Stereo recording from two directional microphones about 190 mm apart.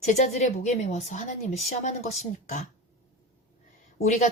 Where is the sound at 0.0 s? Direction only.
40° left (ahead or behind).